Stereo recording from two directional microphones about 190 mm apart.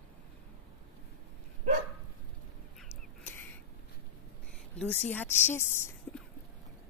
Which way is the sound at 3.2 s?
10° left (ahead or behind).